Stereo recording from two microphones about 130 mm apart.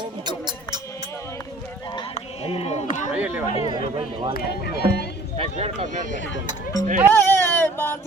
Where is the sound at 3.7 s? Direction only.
35° right (ahead or behind).